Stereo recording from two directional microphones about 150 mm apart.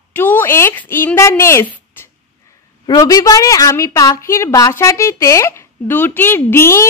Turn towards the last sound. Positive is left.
turn(degrees=15)  # may be behind; listen again after turning